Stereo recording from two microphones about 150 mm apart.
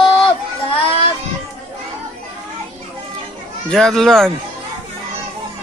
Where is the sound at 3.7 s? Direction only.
5° left (ahead or behind).